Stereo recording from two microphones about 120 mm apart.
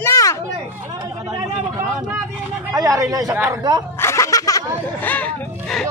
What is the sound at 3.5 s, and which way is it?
Speech, 35° right (ahead or behind).